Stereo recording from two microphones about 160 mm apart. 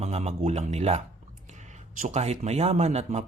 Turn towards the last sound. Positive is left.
turn(degrees=-40)  # may be behind; listen again after turning